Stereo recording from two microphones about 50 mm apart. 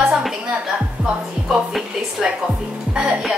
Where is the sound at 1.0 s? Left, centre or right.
Centre.